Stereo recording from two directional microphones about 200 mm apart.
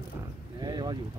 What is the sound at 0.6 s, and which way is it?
Speech, 20° right (ahead or behind).